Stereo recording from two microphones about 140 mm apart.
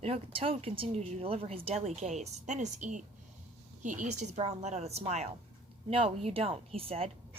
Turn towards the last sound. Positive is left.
turn(degrees=-45)  # may be behind; listen again after turning